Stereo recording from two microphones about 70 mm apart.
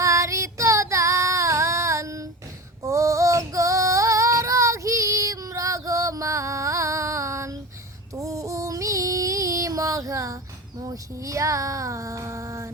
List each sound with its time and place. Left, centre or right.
0.0 s female singing: right
10.8 s speech: right